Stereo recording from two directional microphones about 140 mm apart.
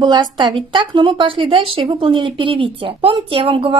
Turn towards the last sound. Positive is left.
turn(degrees=-40)  # may be behind; listen again after turning